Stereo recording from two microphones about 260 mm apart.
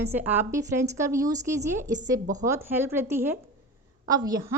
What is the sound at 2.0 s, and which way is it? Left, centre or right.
Speech, right.